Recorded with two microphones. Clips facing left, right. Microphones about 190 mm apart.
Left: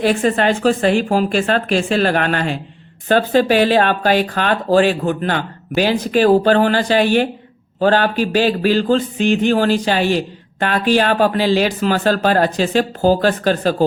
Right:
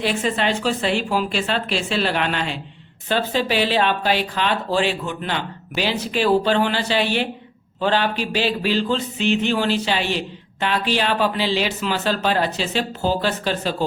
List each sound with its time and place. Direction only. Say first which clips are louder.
0.0 s speech: left 6 dB; 50° left (ahead or behind)